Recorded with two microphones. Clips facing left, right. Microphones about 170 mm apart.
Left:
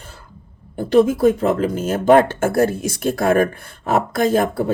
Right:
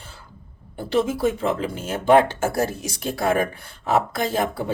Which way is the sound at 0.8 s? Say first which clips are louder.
Left 7 dB; 50° left (ahead or behind).